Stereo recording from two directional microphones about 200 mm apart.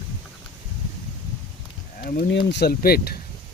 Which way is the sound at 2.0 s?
50° left (ahead or behind).